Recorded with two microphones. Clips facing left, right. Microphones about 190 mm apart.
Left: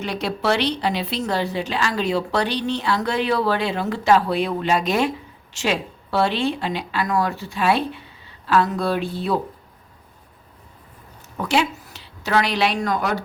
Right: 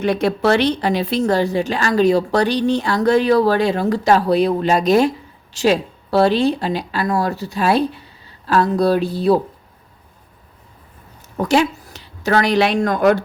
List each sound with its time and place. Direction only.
0.0 s a woman's voice: 50° right (ahead or behind)
11.3 s speech: 45° right (ahead or behind)